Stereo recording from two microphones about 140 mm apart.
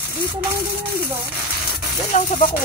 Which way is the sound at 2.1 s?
60° left (ahead or behind).